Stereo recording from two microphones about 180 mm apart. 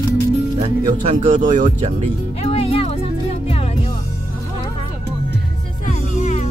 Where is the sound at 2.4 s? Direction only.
35° left (ahead or behind).